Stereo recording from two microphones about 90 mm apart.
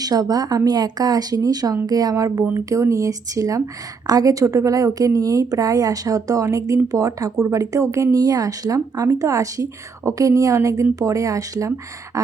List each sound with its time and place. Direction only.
0.0 s a woman's voice: 45° right (ahead or behind)